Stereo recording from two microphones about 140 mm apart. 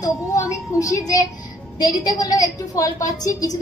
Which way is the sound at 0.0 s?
25° left (ahead or behind).